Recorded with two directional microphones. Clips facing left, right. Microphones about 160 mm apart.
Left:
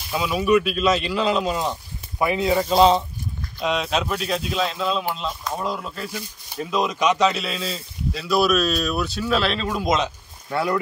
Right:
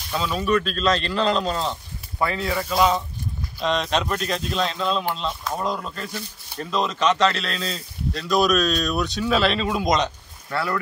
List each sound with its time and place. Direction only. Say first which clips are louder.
0.1 s speech: left 3 dB; 10° left (ahead or behind); by 3.0 s 25° left (ahead or behind)
3.6 s speech: even; 5° left (ahead or behind)
10.5 s speech: left 3 dB; 20° left (ahead or behind)